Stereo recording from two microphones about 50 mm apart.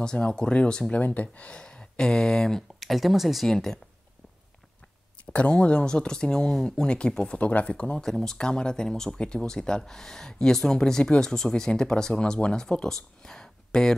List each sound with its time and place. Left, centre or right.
0.0 s speech: centre
0.9 s speech: left; by 3.4 s centre
3.4 s speech: centre
5.2 s speech: left
8.0 s speech: centre